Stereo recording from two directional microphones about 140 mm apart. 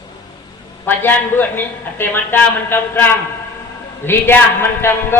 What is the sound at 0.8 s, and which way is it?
A man's voice, 15° left (ahead or behind).